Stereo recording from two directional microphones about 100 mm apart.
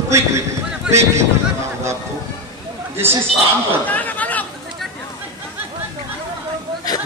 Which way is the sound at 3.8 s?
15° left (ahead or behind).